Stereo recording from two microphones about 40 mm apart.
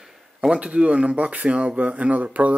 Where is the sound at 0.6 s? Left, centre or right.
Right.